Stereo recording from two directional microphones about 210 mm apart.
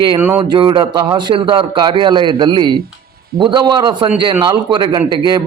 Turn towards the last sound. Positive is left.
turn(degrees=-20)  # may be behind; listen again after turning